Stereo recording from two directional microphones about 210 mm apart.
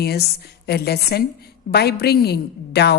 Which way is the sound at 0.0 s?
50° left (ahead or behind).